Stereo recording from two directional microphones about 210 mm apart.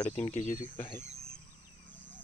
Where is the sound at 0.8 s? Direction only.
10° left (ahead or behind).